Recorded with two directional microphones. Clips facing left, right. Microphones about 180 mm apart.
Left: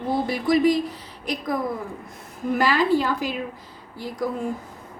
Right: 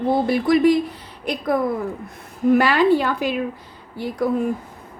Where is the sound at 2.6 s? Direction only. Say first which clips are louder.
Right 1 dB; 60° right (ahead or behind).